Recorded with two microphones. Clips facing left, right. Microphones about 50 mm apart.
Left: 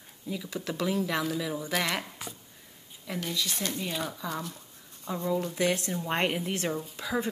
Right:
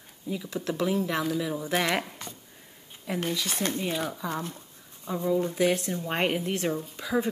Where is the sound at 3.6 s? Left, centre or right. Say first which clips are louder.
Right 4 dB; right.